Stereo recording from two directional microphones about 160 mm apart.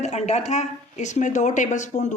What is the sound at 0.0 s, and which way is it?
Speech, 45° left (ahead or behind).